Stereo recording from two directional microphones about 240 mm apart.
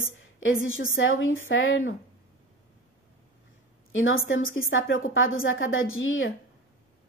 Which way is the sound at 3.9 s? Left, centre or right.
Left.